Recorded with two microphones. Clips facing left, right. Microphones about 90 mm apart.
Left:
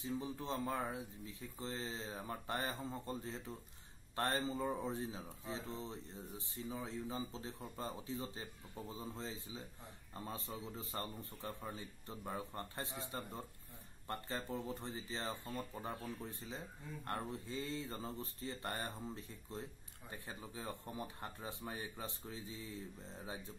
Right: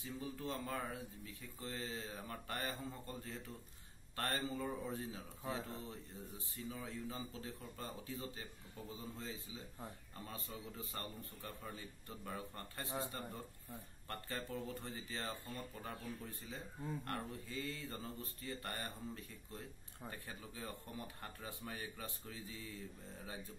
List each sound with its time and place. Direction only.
0.0 s speech: 25° left (ahead or behind)